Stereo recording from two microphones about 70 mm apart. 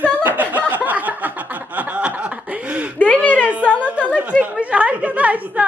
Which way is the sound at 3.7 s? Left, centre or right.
Centre.